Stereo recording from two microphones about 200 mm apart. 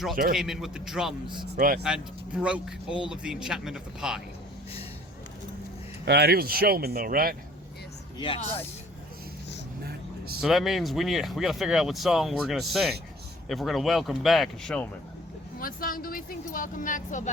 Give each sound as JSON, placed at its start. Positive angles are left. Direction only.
{"t": 0.3, "sound": "speech", "side_deg": 0}
{"t": 1.5, "sound": "speech", "side_deg": -45}
{"t": 1.8, "sound": "speech", "side_deg": -5}
{"t": 6.1, "sound": "speech", "side_deg": -55}
{"t": 8.2, "sound": "speech", "side_deg": 25}
{"t": 10.4, "sound": "speech", "side_deg": 0}
{"t": 15.5, "sound": "a woman's voice", "side_deg": 45}